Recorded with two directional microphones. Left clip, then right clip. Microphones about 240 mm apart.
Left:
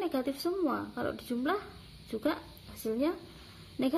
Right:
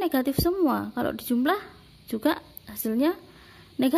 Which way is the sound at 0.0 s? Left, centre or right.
Right.